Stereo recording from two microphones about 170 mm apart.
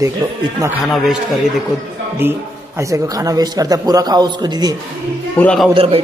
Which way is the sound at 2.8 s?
20° right (ahead or behind).